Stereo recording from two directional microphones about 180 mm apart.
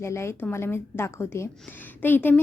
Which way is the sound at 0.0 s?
15° left (ahead or behind).